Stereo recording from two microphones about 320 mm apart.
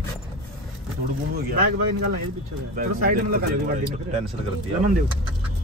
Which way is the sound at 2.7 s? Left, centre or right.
Right.